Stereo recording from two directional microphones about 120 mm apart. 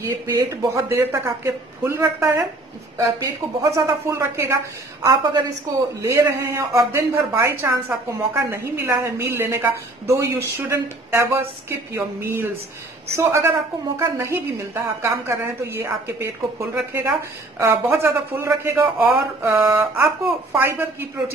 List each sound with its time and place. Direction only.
0.0 s a woman's voice: 25° right (ahead or behind)
5.0 s a woman's voice: 35° right (ahead or behind); by 21.1 s 20° right (ahead or behind)